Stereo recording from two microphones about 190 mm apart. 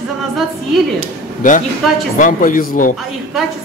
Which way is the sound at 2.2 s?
45° left (ahead or behind).